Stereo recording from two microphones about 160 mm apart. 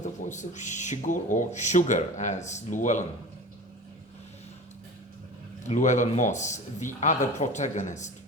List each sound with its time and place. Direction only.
0.0 s speech: 50° left (ahead or behind)
5.6 s speech: 50° left (ahead or behind)